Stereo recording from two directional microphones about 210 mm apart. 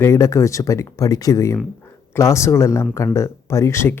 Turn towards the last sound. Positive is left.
turn(degrees=10)  # may be behind; listen again after turning